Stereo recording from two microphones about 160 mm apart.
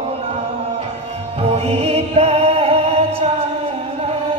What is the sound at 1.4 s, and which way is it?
Music, 40° right (ahead or behind).